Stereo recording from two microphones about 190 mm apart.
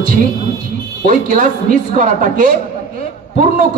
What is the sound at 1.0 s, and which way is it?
A man's voice, 40° right (ahead or behind).